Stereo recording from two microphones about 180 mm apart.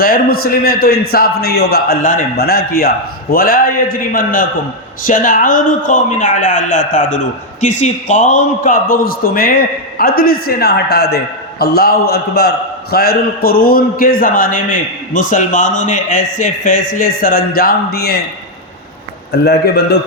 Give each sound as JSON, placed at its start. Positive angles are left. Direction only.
{"t": 0.0, "sound": "a man's voice", "side_deg": 55}
{"t": 19.3, "sound": "a man's voice", "side_deg": 65}